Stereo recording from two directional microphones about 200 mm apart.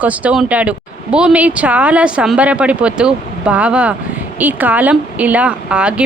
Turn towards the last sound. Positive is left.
turn(degrees=-5)  # may be behind; listen again after turning